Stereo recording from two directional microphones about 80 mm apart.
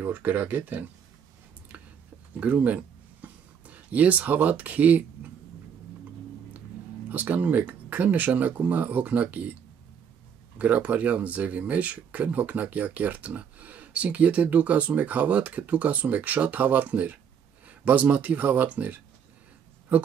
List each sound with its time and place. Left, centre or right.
0.0 s speech: right
2.4 s speech: centre
7.1 s speech: right
10.6 s speech: centre